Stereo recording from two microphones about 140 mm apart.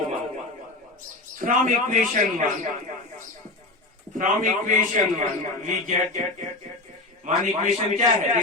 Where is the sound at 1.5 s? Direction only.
70° right (ahead or behind).